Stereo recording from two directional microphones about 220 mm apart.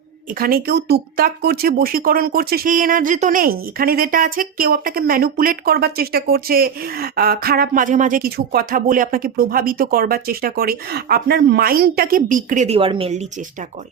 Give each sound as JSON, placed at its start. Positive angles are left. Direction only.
{"t": 0.3, "sound": "speech", "side_deg": -40}